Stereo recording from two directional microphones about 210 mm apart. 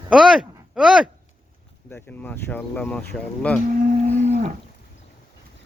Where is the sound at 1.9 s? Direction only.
10° left (ahead or behind).